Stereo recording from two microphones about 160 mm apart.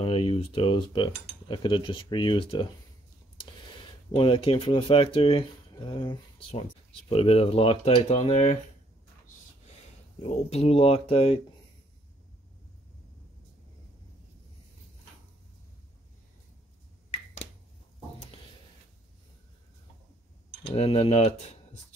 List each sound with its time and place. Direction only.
0.0 s cutlery: 35° left (ahead or behind)
4.1 s cutlery: 30° left (ahead or behind)
10.2 s cutlery: 40° left (ahead or behind)
20.6 s cutlery: 40° left (ahead or behind)